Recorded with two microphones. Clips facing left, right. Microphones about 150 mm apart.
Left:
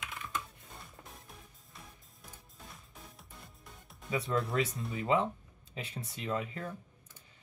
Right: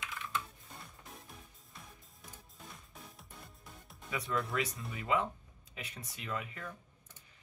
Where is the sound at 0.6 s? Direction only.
Centre (ahead or behind).